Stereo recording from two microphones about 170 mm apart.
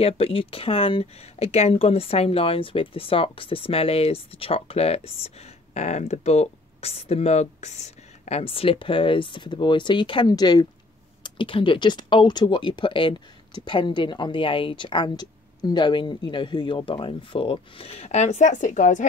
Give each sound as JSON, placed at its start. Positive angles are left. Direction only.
{"t": 0.0, "sound": "speech", "side_deg": 35}